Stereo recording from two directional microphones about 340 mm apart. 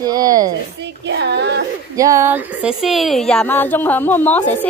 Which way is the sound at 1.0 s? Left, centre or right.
Right.